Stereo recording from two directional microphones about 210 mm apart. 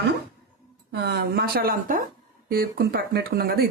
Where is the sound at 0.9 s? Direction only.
50° right (ahead or behind).